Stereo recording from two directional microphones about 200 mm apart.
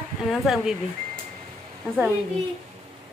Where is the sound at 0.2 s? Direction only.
Centre (ahead or behind).